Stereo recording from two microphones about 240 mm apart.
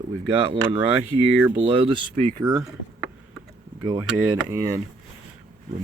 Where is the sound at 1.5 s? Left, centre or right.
Right.